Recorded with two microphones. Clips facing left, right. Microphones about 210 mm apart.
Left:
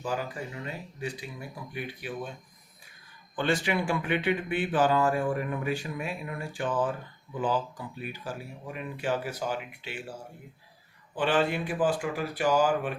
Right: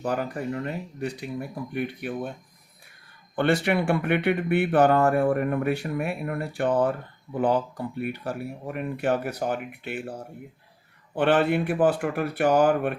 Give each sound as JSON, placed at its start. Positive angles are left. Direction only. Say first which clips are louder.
{"t": 0.0, "sound": "speech", "louder": "right 5 dB", "side_deg": -60}
{"t": 3.3, "sound": "speech", "louder": "right 5 dB", "side_deg": -60}